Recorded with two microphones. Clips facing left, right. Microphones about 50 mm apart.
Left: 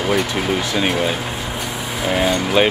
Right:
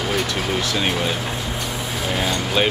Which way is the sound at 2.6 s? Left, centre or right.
Centre.